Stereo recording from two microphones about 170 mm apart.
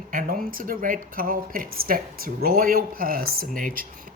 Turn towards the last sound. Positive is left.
turn(degrees=-55)  # may be behind; listen again after turning